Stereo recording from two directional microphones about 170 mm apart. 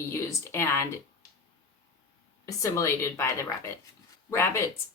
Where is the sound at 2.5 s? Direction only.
20° left (ahead or behind).